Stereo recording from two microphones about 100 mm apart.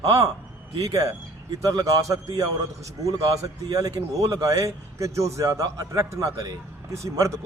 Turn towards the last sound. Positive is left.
turn(degrees=-30)  # may be behind; listen again after turning